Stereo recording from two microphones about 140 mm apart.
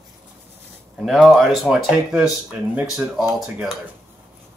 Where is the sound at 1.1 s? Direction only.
Centre (ahead or behind).